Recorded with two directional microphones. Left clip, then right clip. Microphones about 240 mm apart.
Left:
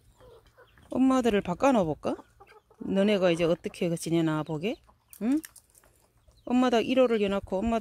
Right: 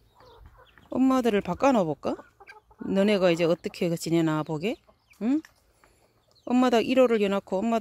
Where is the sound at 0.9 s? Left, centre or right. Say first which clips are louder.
Right 1 dB; centre.